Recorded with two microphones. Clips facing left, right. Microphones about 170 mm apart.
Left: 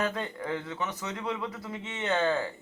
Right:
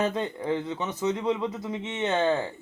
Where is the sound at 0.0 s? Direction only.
20° right (ahead or behind).